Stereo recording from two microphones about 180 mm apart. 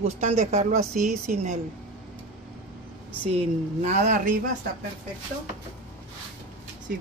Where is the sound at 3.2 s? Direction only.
35° right (ahead or behind).